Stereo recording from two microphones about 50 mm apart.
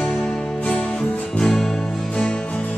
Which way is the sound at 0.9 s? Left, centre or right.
Centre.